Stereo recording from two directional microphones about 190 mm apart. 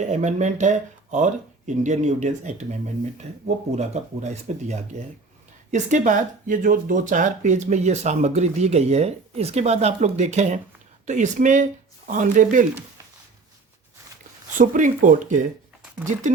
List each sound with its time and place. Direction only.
0.0 s speech: 40° right (ahead or behind)
14.6 s speech: 45° right (ahead or behind)